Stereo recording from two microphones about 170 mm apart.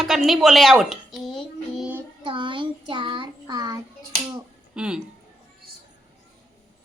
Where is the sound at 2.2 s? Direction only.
30° right (ahead or behind).